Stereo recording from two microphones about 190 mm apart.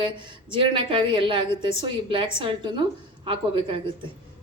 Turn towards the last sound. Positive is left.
turn(degrees=-30)  # may be behind; listen again after turning